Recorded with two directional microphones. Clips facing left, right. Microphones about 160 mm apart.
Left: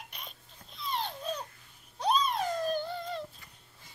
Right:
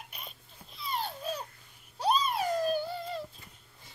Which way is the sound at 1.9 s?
5° right (ahead or behind).